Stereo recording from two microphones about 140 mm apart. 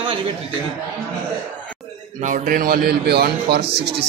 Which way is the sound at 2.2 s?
70° right (ahead or behind).